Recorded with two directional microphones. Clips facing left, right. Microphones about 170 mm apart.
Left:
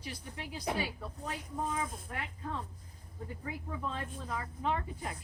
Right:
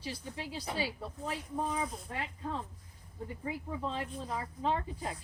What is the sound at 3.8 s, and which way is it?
Speech, 25° right (ahead or behind).